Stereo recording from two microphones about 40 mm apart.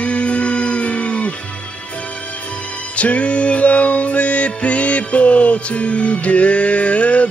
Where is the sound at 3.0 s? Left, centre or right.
Left.